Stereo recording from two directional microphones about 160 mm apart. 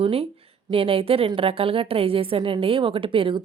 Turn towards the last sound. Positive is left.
turn(degrees=-35)  # may be behind; listen again after turning